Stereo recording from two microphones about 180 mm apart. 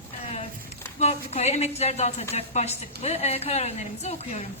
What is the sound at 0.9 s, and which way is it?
A woman's voice, 35° left (ahead or behind).